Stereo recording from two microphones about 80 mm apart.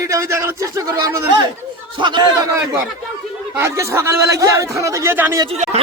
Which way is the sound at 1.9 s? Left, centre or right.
Right.